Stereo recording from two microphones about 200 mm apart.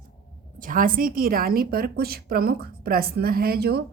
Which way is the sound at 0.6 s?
45° right (ahead or behind).